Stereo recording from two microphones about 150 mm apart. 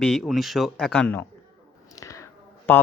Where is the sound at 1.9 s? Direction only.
20° left (ahead or behind).